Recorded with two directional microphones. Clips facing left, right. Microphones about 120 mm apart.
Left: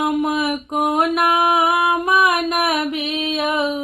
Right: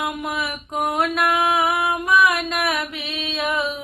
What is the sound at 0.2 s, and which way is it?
Music, 20° left (ahead or behind).